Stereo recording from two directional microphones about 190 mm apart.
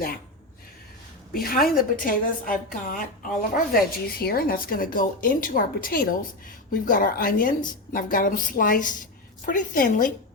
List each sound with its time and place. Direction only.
1.3 s a woman's voice: 50° left (ahead or behind)